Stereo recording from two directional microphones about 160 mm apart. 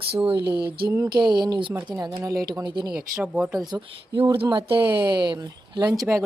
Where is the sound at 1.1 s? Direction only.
30° right (ahead or behind).